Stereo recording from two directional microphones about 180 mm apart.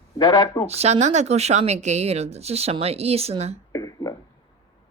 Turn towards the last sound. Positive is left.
turn(degrees=20)  # may be behind; listen again after turning